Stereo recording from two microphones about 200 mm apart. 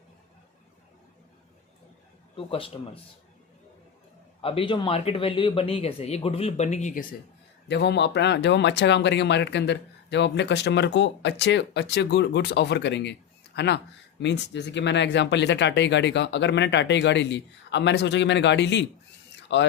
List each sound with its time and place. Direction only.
2.3 s speech: 25° left (ahead or behind)
4.4 s speech: 30° left (ahead or behind)
7.7 s speech: 60° left (ahead or behind)